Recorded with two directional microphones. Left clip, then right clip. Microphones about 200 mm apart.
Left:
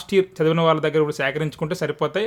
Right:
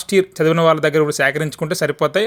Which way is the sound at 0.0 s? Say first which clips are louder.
Right 4 dB; 15° right (ahead or behind).